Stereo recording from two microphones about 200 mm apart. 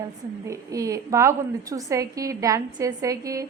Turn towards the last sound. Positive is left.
turn(degrees=-15)  # may be behind; listen again after turning